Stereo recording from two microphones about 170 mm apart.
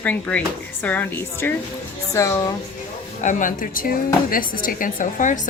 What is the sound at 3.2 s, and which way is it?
Speech, 45° left (ahead or behind).